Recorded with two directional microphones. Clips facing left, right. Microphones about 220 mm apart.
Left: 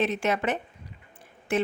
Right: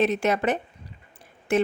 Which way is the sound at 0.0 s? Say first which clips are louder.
Right 4 dB; 40° right (ahead or behind).